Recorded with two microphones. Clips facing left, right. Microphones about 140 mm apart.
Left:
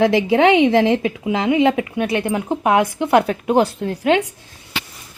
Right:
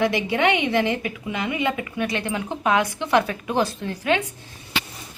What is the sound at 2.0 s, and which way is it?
A woman's voice, 55° left (ahead or behind).